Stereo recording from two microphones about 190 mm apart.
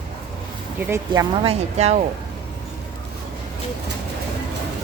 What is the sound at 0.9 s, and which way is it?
Speech, 15° right (ahead or behind).